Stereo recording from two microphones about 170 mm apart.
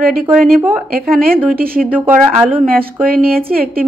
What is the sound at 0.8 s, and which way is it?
A woman's voice, 60° right (ahead or behind).